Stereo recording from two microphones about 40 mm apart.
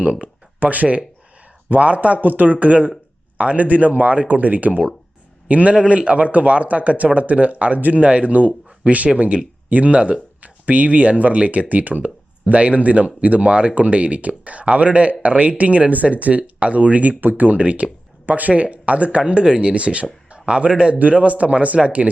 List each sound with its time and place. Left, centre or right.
0.0 s a man's voice: right
5.7 s speech: right
17.2 s speech: right
18.3 s speech: right
19.2 s speech: right